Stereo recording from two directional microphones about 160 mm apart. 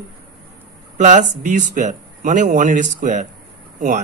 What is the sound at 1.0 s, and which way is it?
Speech, 50° right (ahead or behind).